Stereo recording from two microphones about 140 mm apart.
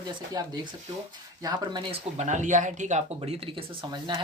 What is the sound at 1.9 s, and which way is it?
Speech, 55° right (ahead or behind).